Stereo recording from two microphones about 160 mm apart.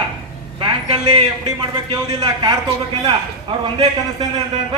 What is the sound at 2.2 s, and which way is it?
Speech, 25° right (ahead or behind).